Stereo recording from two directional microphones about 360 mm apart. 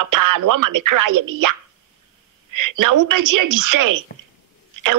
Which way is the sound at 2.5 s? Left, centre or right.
Right.